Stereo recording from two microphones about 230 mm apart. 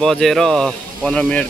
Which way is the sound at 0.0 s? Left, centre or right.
Centre.